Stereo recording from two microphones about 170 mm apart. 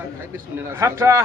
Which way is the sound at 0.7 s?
15° right (ahead or behind).